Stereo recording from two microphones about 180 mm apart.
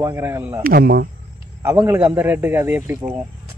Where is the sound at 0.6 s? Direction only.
55° right (ahead or behind).